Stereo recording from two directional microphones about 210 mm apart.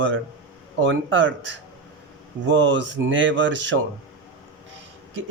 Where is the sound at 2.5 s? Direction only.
60° right (ahead or behind).